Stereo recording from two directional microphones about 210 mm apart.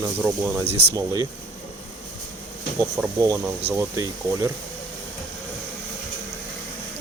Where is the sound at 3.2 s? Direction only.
15° right (ahead or behind).